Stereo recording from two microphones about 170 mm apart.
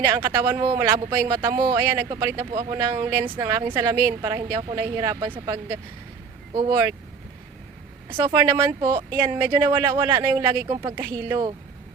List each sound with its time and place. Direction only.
0.1 s a woman's voice: 15° right (ahead or behind)
8.1 s speech: 20° right (ahead or behind)